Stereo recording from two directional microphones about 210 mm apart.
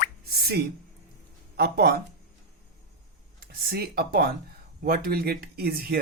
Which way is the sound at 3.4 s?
45° right (ahead or behind).